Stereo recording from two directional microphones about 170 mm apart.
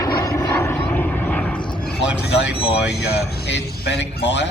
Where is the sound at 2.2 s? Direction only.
90° left.